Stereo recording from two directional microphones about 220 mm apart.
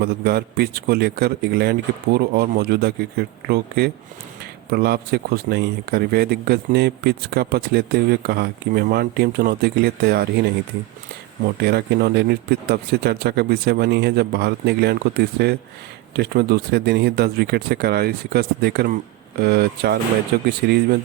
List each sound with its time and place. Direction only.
0.0 s speech: 45° right (ahead or behind)
11.6 s speech: 45° right (ahead or behind)